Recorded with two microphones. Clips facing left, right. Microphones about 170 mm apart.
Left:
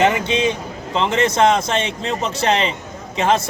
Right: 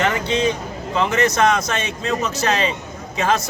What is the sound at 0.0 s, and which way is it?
A man's voice, 20° left (ahead or behind).